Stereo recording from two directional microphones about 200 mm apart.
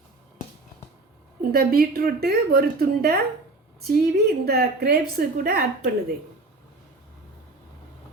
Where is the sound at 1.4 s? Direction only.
50° right (ahead or behind).